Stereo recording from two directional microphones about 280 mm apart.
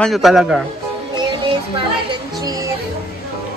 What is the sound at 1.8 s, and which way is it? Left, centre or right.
Music, centre.